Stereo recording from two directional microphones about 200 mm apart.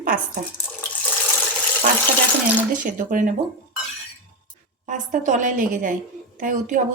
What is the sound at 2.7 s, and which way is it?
Speech, 40° right (ahead or behind).